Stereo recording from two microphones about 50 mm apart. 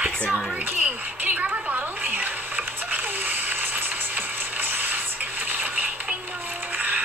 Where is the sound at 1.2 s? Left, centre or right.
Right.